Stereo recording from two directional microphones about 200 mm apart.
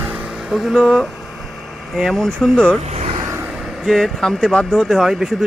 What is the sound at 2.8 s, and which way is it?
Vehicle, 35° right (ahead or behind).